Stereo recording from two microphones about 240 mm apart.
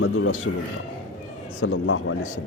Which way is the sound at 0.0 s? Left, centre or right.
Left.